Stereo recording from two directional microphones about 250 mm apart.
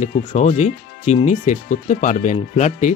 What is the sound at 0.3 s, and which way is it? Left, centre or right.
Speech, left.